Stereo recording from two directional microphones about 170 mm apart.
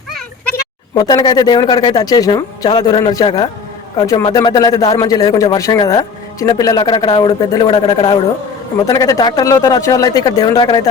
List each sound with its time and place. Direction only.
0.9 s speech: 25° left (ahead or behind)